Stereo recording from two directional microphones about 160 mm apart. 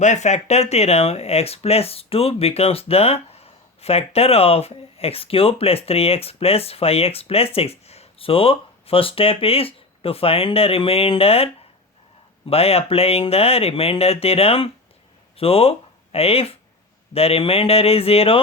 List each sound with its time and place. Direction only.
0.0 s speech: 45° left (ahead or behind)
12.5 s speech: 40° left (ahead or behind)